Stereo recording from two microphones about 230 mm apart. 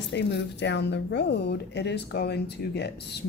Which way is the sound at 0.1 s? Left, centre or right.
Left.